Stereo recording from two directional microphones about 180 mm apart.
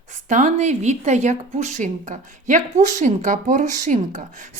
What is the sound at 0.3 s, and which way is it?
A woman's voice, 45° right (ahead or behind).